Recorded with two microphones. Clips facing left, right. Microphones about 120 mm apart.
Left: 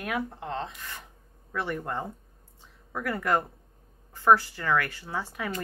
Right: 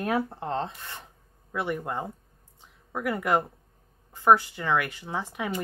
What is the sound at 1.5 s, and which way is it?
Speech, 15° right (ahead or behind).